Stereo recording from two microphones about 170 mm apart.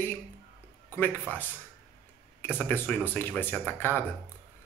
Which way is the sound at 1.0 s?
10° left (ahead or behind).